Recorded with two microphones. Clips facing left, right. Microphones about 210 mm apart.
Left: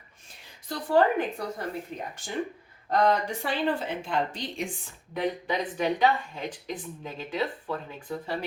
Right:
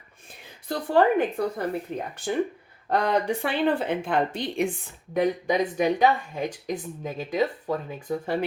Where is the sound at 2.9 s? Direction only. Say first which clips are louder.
Right 1 dB; 60° right (ahead or behind).